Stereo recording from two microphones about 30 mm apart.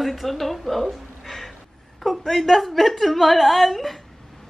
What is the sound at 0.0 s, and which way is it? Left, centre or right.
A woman's voice, centre.